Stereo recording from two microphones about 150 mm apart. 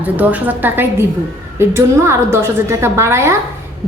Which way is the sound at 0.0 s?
10° right (ahead or behind).